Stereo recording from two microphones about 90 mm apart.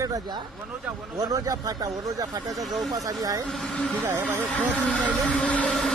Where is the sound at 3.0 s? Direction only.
40° right (ahead or behind).